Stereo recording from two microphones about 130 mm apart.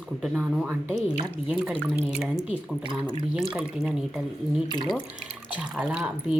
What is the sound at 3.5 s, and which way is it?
Speech, 5° right (ahead or behind).